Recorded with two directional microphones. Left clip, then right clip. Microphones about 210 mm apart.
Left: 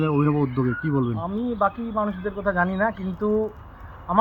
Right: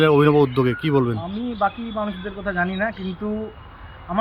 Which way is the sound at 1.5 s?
10° left (ahead or behind).